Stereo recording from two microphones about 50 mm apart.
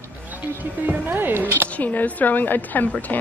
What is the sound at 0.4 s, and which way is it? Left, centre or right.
Speech, right.